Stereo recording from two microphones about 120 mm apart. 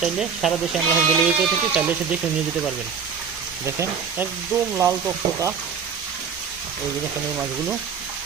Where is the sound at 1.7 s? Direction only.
10° right (ahead or behind).